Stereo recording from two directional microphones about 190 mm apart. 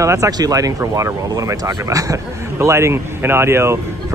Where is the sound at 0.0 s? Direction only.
15° right (ahead or behind).